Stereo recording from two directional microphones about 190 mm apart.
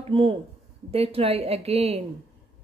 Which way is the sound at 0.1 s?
30° right (ahead or behind).